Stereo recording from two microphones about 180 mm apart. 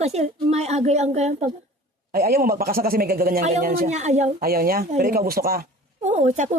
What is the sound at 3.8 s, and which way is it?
Speech, 40° right (ahead or behind).